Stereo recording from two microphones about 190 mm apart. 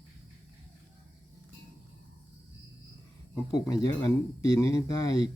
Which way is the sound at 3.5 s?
20° left (ahead or behind).